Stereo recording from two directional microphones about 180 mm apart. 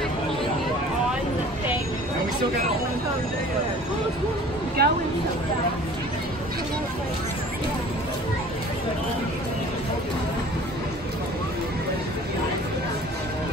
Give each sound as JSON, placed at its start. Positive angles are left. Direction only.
{"t": 4.8, "sound": "speech", "side_deg": -60}